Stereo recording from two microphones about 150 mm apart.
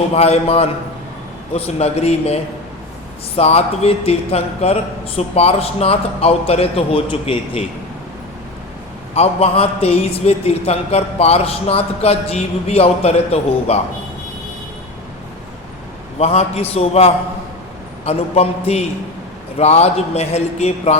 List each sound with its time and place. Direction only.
0.1 s a man's voice: 45° left (ahead or behind)
9.1 s a man's voice: 45° left (ahead or behind)
16.1 s a man's voice: 45° left (ahead or behind)